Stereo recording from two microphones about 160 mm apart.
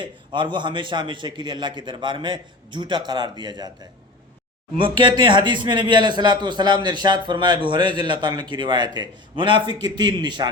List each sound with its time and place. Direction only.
0.0 s a man's voice: 30° right (ahead or behind)
4.8 s a man's voice: 30° right (ahead or behind)